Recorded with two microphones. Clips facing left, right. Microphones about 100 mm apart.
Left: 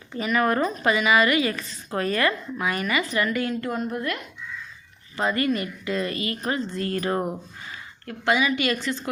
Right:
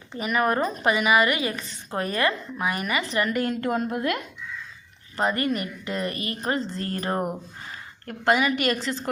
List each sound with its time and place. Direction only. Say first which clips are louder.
0.2 s speech: left 1 dB; 20° right (ahead or behind)
3.6 s a woman's voice: right 2 dB; 60° right (ahead or behind)
5.3 s speech: left 2 dB; 30° right (ahead or behind)
8.0 s a woman's voice: right 1 dB; 45° right (ahead or behind)